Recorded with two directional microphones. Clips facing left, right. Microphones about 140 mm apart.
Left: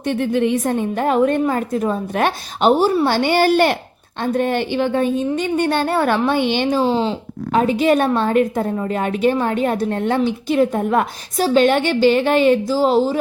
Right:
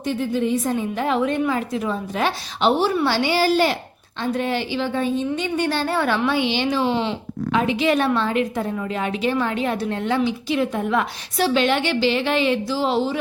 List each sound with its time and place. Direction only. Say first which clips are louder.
0.0 s a woman's voice: left 4 dB; 65° left (ahead or behind); by 13.1 s 40° left (ahead or behind)